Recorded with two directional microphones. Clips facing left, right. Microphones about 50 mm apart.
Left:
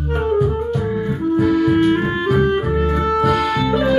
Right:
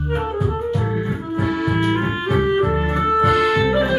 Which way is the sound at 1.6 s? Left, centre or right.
Centre.